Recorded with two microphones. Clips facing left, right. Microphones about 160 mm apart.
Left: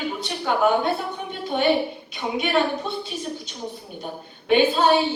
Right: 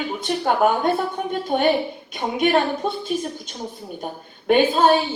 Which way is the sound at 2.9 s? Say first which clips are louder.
Right 4 dB; 50° right (ahead or behind).